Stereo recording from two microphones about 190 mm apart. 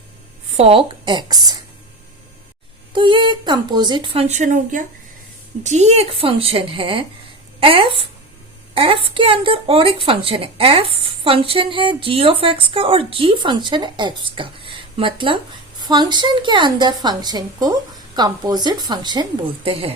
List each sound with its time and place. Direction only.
0.5 s a woman's voice: 30° right (ahead or behind)
2.9 s a woman's voice: 25° right (ahead or behind)